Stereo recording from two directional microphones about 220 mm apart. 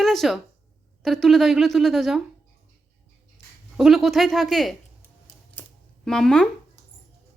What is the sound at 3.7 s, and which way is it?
A woman's voice, centre (ahead or behind).